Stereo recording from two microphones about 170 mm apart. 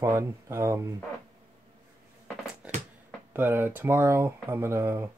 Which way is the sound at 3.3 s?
15° right (ahead or behind).